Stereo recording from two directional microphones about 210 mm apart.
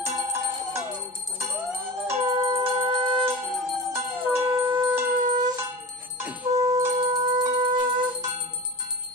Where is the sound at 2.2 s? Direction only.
20° right (ahead or behind).